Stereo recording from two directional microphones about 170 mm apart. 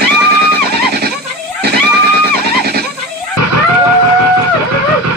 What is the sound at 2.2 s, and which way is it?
Vehicle, 65° right (ahead or behind).